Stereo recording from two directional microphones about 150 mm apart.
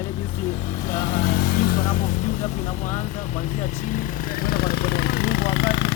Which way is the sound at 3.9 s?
75° left (ahead or behind).